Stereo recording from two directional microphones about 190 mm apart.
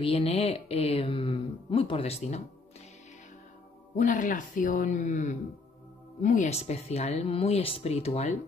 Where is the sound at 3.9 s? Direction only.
40° left (ahead or behind).